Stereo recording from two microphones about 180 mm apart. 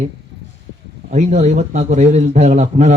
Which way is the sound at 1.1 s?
40° right (ahead or behind).